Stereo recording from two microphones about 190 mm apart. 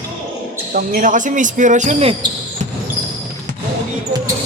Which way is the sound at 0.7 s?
50° right (ahead or behind).